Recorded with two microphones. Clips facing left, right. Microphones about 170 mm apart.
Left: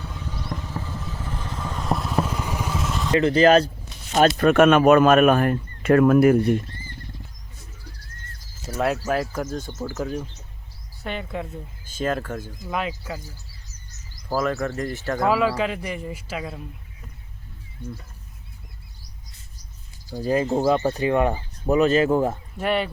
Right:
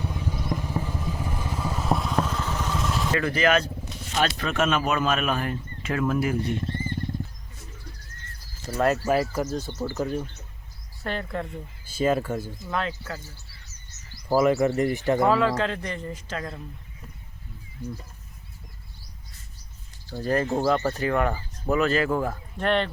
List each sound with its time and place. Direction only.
0.0 s vehicle: 10° right (ahead or behind)
3.1 s speech: 25° left (ahead or behind)
4.1 s speech: 50° left (ahead or behind)
6.7 s wild animals: 25° right (ahead or behind)
8.6 s speech: 5° left (ahead or behind)
11.9 s speech: 10° right (ahead or behind)
12.6 s speech: 10° left (ahead or behind)
14.3 s speech: 15° right (ahead or behind)
15.3 s speech: 10° left (ahead or behind)
20.1 s speech: 10° left (ahead or behind)
22.5 s speech: 5° left (ahead or behind)